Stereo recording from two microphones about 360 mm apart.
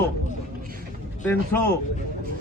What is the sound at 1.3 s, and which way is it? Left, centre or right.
Speech, centre.